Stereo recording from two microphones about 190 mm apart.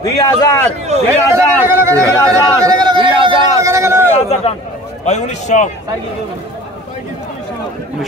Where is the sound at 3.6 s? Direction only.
15° right (ahead or behind).